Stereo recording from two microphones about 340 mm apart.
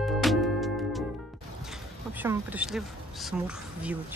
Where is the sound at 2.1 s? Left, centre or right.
Centre.